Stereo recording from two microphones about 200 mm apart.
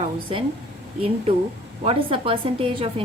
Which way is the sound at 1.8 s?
30° right (ahead or behind).